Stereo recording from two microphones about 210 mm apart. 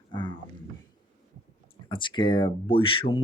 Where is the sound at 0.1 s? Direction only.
20° left (ahead or behind).